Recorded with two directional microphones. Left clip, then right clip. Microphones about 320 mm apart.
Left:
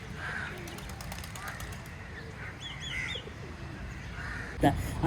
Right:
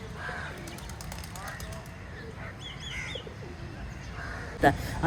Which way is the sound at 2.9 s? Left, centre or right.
Right.